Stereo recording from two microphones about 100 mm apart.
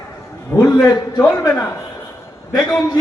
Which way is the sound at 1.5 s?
20° left (ahead or behind).